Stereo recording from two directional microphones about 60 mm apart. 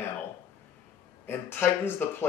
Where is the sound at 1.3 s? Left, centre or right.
Left.